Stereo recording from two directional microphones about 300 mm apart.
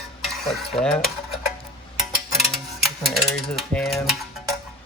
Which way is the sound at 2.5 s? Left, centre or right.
Centre.